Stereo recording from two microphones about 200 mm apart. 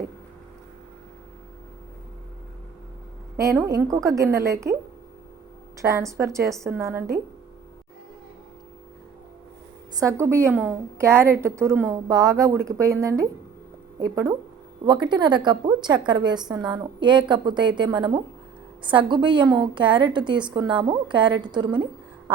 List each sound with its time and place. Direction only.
3.3 s a woman's voice: 15° right (ahead or behind)
5.8 s a woman's voice: 15° right (ahead or behind)
10.0 s a woman's voice: 15° right (ahead or behind)